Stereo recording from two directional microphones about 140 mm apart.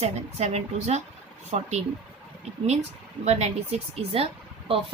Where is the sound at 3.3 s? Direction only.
50° right (ahead or behind).